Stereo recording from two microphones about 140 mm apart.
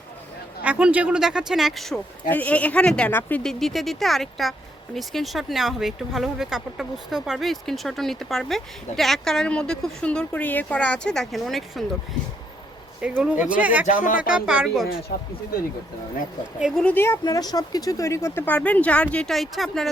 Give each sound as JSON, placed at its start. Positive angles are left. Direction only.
{"t": 0.6, "sound": "speech", "side_deg": -10}
{"t": 13.0, "sound": "speech", "side_deg": -10}
{"t": 13.8, "sound": "speech", "side_deg": 65}
{"t": 14.2, "sound": "speech", "side_deg": -5}
{"t": 16.6, "sound": "speech", "side_deg": -5}
{"t": 16.8, "sound": "speech", "side_deg": 15}
{"t": 17.2, "sound": "speech", "side_deg": 30}